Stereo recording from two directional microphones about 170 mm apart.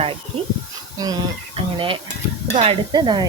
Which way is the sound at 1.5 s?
30° right (ahead or behind).